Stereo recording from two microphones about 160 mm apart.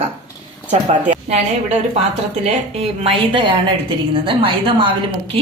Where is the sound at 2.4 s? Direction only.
40° right (ahead or behind).